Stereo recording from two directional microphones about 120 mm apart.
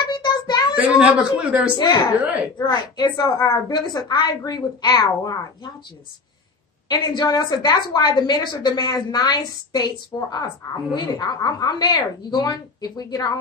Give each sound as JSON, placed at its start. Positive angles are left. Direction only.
{"t": 0.1, "sound": "child singing", "side_deg": 40}
{"t": 0.7, "sound": "a man's voice", "side_deg": -10}
{"t": 1.8, "sound": "a woman's voice", "side_deg": 35}
{"t": 6.9, "sound": "a woman's voice", "side_deg": 35}